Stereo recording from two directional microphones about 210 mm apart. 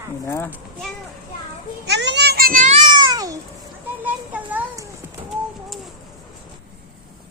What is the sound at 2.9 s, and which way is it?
Babbling, 20° right (ahead or behind).